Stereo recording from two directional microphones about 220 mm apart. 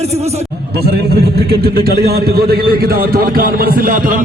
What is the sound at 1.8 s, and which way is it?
A man's voice, 45° right (ahead or behind).